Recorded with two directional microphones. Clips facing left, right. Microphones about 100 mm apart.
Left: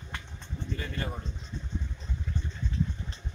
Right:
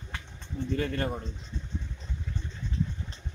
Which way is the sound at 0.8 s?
60° right (ahead or behind).